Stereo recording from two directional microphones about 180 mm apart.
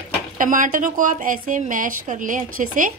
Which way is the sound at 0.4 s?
50° right (ahead or behind).